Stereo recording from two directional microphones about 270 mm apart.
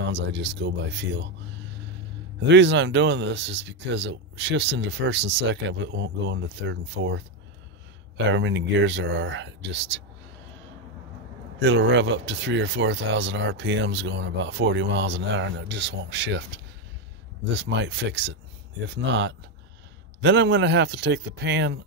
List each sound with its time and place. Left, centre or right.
0.0 s speech: right
2.4 s speech: right
8.3 s speech: right
11.6 s speech: right